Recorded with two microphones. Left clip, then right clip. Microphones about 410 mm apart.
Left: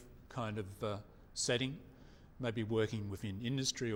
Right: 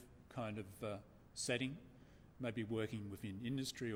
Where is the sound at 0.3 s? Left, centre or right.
Left.